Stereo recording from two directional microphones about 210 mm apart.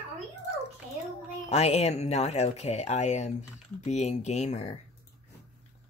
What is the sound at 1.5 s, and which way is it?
Speech, 30° left (ahead or behind).